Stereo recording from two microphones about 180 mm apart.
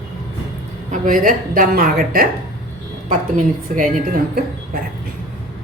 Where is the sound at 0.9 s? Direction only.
50° right (ahead or behind).